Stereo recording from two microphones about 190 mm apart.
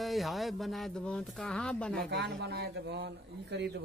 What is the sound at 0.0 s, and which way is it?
Speech, centre (ahead or behind).